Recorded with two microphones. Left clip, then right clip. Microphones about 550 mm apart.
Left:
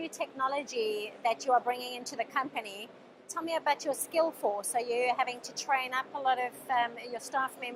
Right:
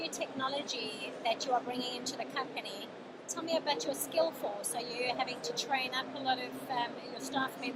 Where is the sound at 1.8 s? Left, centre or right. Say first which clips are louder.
Left 2 dB; left.